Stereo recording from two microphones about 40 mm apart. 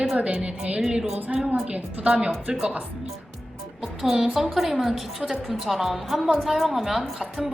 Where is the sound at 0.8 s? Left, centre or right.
Centre.